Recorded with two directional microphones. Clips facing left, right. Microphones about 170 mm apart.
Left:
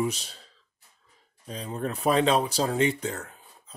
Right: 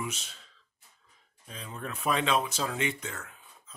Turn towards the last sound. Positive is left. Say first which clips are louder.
# left 3 dB
turn(degrees=35)  # may be behind; listen again after turning